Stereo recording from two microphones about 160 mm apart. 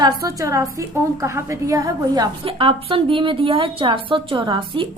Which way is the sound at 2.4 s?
35° right (ahead or behind).